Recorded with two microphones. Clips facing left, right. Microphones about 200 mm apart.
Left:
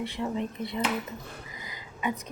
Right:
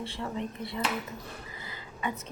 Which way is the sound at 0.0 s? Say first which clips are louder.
Left 4 dB; 15° left (ahead or behind).